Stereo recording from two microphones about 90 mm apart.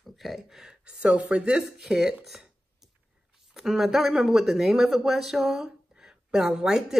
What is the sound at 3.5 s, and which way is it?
Speech, 5° right (ahead or behind).